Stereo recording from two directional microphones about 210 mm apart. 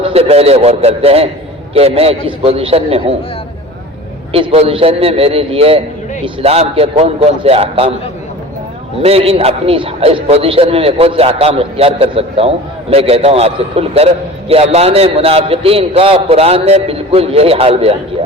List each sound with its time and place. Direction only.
0.1 s a man's voice: 30° right (ahead or behind)
4.3 s a man's voice: 30° right (ahead or behind)
9.0 s a man's voice: 30° right (ahead or behind)